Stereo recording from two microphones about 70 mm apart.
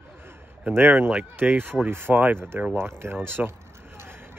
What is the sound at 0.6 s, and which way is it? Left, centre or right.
Speech, right.